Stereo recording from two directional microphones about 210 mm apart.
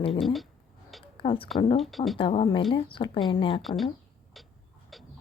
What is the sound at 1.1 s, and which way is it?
Speech, 25° left (ahead or behind).